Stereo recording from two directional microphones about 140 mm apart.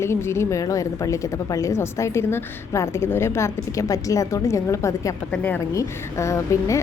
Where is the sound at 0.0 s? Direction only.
20° left (ahead or behind).